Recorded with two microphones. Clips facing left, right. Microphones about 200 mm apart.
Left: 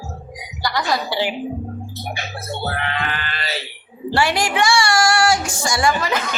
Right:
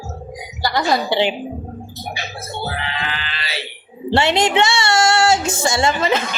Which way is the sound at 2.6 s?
55° left (ahead or behind).